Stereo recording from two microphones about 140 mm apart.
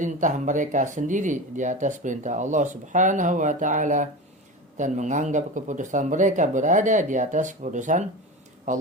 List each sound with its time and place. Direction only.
0.0 s speech: 65° right (ahead or behind)